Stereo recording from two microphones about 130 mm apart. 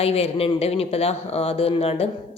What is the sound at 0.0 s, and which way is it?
A woman's voice, 50° left (ahead or behind).